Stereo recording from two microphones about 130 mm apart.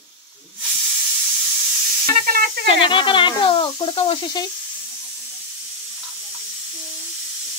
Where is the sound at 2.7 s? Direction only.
40° left (ahead or behind).